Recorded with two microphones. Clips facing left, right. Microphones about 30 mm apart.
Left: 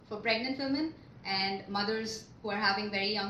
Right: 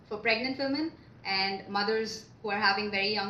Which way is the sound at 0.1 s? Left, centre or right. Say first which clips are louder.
Right 3 dB; centre.